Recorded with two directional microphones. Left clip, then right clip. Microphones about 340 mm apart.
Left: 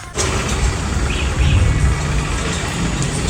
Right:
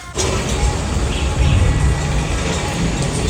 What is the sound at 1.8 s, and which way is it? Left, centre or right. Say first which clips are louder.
Vehicle: even; centre.